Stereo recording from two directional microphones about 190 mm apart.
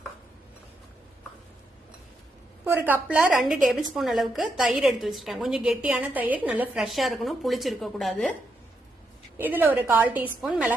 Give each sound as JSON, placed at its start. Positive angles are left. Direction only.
{"t": 2.6, "sound": "a woman's voice", "side_deg": -10}
{"t": 9.4, "sound": "a woman's voice", "side_deg": -10}